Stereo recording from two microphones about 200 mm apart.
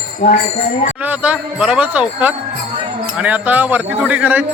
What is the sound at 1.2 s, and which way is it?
A man's voice, 5° right (ahead or behind).